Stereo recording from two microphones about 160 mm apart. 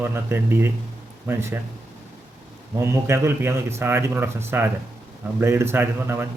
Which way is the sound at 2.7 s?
15° right (ahead or behind).